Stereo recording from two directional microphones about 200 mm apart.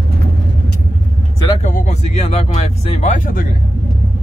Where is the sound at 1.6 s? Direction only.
35° left (ahead or behind).